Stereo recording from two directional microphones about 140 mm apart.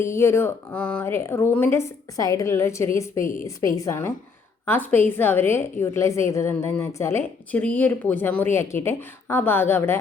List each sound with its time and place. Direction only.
0.0 s a woman's voice: 20° left (ahead or behind)